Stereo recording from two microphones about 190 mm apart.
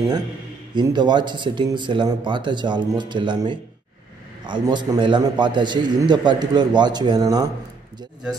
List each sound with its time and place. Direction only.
0.7 s a man's voice: 25° right (ahead or behind)